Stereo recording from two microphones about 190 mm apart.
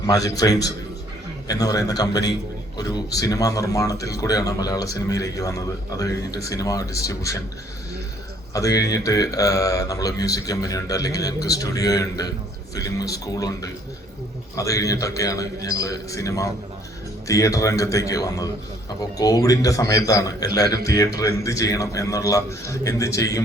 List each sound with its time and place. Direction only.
0.0 s speech: 20° left (ahead or behind)
8.5 s speech: 20° left (ahead or behind)